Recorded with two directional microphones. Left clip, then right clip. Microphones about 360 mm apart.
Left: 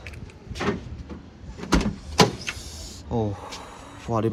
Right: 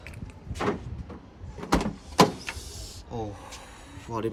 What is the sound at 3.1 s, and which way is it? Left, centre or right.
Speech, centre.